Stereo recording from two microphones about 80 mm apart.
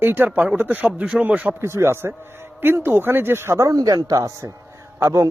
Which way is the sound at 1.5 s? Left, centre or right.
Right.